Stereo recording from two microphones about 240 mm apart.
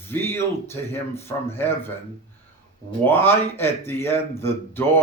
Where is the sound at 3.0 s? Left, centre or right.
Centre.